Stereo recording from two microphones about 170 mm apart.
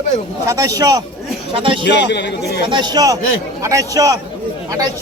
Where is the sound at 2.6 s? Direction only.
25° right (ahead or behind).